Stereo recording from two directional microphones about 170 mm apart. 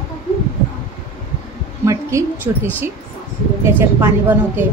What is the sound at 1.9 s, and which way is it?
Speech, 15° right (ahead or behind).